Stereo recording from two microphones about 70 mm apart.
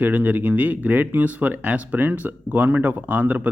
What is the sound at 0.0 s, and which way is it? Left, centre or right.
Speech, right.